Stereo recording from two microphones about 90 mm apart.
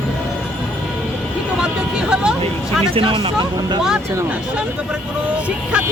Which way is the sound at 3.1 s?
55° right (ahead or behind).